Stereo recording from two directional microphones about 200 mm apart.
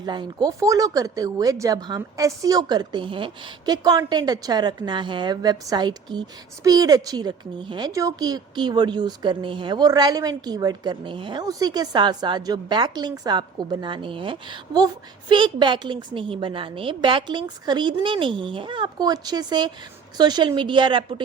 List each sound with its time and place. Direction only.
0.0 s speech: 20° right (ahead or behind)